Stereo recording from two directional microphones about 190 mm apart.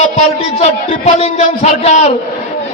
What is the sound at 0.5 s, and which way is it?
A man's voice, 35° left (ahead or behind).